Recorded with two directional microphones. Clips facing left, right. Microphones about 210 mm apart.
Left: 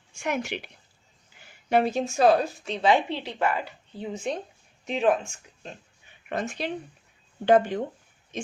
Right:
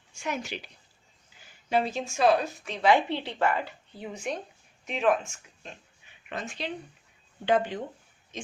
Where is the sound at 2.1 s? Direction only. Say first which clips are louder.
Left 2 dB; 35° left (ahead or behind).